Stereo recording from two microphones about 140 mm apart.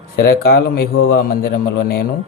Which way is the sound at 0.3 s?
90° left.